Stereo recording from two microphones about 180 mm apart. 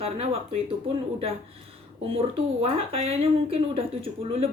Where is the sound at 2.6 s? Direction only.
30° right (ahead or behind).